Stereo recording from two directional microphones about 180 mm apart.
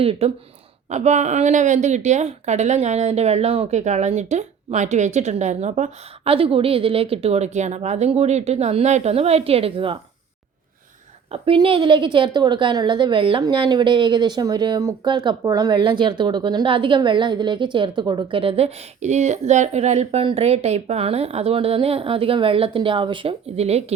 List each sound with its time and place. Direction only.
0.0 s a woman's voice: 30° right (ahead or behind)
11.3 s a woman's voice: 30° right (ahead or behind)